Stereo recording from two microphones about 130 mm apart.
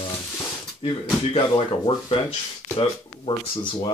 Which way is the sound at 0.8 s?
45° left (ahead or behind).